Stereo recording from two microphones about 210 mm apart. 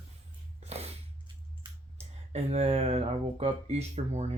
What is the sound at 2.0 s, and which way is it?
Speech, 30° right (ahead or behind).